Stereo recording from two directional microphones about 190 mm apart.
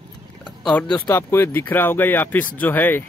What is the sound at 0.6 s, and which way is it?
Speech, 5° left (ahead or behind).